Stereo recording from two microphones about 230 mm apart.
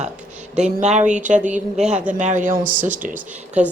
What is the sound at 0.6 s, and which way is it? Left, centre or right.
Speech, right.